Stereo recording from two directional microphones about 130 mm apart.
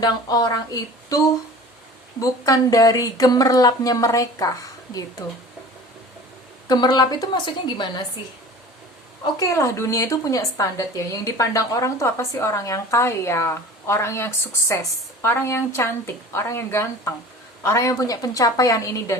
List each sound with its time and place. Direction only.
0.0 s a woman's voice: 30° left (ahead or behind)
2.2 s a woman's voice: 25° left (ahead or behind)
6.7 s a woman's voice: 30° left (ahead or behind)
9.2 s a woman's voice: 25° left (ahead or behind)